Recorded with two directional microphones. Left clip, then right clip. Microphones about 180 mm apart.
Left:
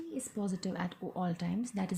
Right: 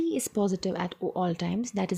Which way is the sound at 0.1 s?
45° right (ahead or behind).